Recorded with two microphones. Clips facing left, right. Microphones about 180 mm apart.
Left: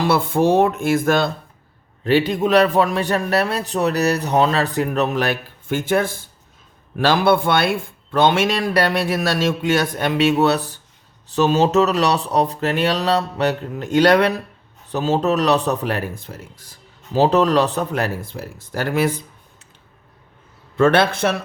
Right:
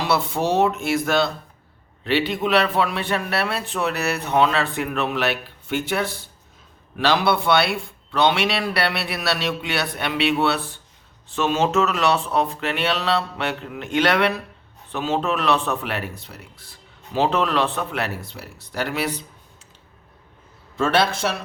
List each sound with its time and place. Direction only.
0.0 s a man's voice: 50° left (ahead or behind)
20.7 s speech: 55° left (ahead or behind)